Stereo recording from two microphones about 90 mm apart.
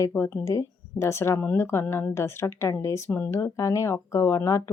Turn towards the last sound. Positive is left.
turn(degrees=35)  # may be behind; listen again after turning